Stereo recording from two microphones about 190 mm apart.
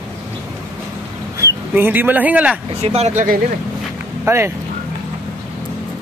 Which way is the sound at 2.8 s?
35° right (ahead or behind).